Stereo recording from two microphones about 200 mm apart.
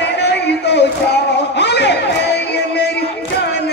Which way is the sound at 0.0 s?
55° left (ahead or behind).